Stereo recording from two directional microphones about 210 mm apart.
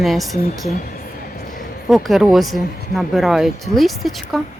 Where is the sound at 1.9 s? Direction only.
Centre (ahead or behind).